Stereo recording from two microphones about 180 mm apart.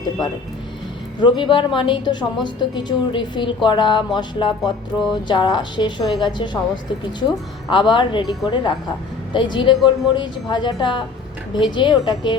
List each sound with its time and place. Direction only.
1.2 s a woman's voice: 25° left (ahead or behind)
8.2 s speech: centre (ahead or behind)
9.3 s a woman's voice: 25° left (ahead or behind)